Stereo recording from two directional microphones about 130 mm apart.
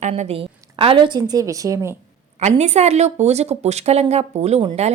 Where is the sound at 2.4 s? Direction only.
60° right (ahead or behind).